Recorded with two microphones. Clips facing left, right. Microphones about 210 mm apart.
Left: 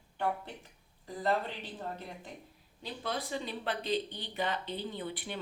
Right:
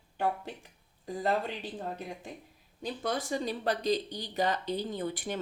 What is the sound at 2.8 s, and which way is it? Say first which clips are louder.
Speech: right 4 dB; 45° right (ahead or behind).